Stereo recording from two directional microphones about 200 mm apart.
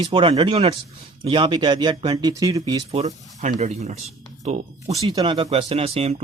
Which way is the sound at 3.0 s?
35° right (ahead or behind).